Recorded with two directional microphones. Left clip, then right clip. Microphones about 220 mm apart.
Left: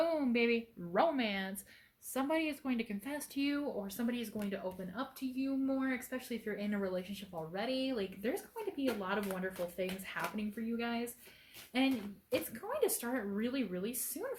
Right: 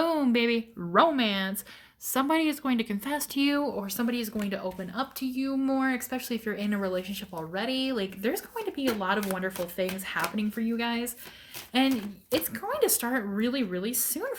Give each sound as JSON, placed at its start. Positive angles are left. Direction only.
{"t": 0.0, "sound": "speech", "side_deg": -50}